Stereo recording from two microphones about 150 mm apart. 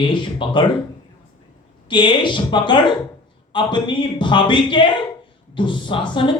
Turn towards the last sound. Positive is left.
turn(degrees=30)  # may be behind; listen again after turning